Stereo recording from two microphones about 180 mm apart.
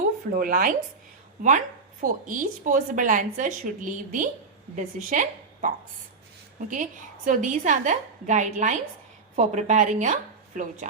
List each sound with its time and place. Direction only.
0.3 s a woman's voice: 50° right (ahead or behind)
7.3 s a woman's voice: 45° right (ahead or behind)